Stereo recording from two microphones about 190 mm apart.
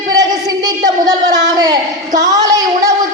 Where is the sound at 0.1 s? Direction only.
20° right (ahead or behind).